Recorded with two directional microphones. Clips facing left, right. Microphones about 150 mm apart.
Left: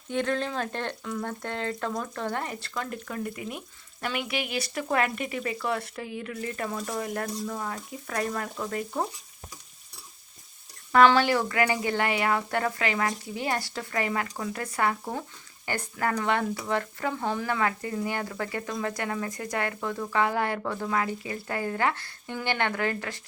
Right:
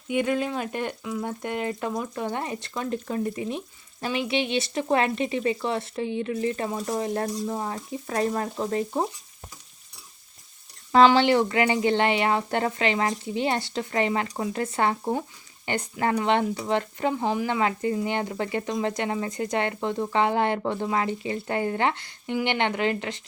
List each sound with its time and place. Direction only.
0.1 s speech: 10° right (ahead or behind)
10.9 s speech: 20° right (ahead or behind)